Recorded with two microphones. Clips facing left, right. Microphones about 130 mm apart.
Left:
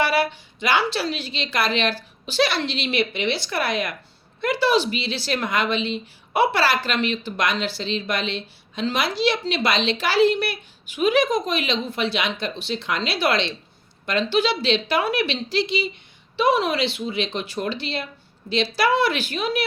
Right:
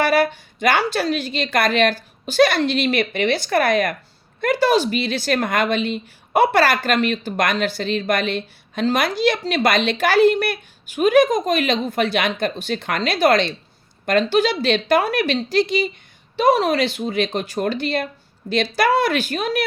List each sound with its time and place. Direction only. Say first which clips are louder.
0.0 s a woman's voice: right 4 dB; 45° right (ahead or behind)